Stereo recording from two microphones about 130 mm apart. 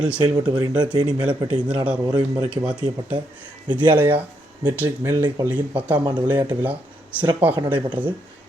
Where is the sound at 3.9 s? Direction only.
15° right (ahead or behind).